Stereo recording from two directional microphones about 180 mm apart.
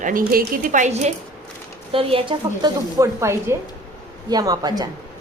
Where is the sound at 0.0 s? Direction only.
50° right (ahead or behind).